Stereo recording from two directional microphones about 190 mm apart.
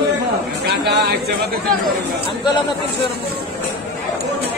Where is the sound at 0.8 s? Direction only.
60° right (ahead or behind).